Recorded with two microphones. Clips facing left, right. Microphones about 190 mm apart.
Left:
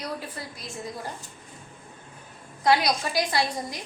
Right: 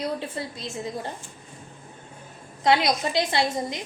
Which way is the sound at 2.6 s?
25° right (ahead or behind).